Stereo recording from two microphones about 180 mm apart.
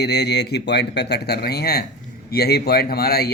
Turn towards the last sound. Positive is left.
turn(degrees=60)  # may be behind; listen again after turning